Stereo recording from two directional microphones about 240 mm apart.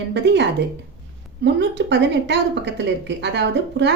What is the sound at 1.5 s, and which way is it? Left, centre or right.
A woman's voice, right.